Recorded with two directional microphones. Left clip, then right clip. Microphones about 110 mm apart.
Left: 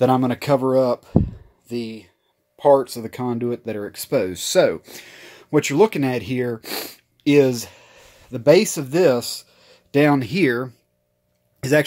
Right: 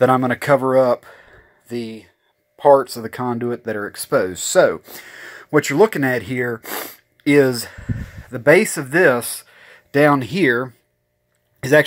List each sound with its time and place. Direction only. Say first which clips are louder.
0.0 s speech: right 3 dB; 30° left (ahead or behind)
4.3 s speech: right 2 dB; 30° left (ahead or behind)
6.3 s speech: right 2 dB; 35° left (ahead or behind)
7.2 s speech: right 1 dB; 15° left (ahead or behind)